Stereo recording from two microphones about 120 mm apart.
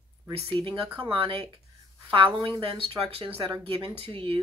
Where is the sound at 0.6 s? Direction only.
45° right (ahead or behind).